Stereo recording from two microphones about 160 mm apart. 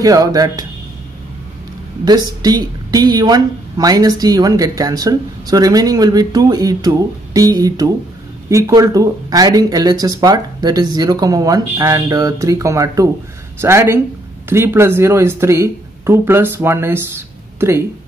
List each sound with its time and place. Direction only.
0.0 s speech: 20° right (ahead or behind)
2.0 s speech: 25° right (ahead or behind)